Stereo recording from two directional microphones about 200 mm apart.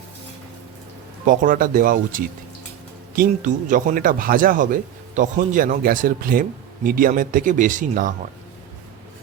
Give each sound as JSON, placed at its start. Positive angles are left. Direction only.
{"t": 1.2, "sound": "speech", "side_deg": -40}